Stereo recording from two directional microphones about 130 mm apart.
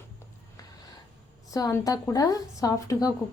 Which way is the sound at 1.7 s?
25° left (ahead or behind).